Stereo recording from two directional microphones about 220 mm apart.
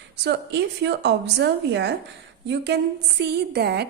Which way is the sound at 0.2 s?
50° right (ahead or behind).